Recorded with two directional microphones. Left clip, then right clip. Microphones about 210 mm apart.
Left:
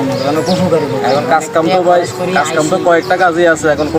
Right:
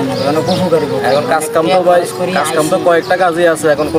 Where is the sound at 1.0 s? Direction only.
15° right (ahead or behind).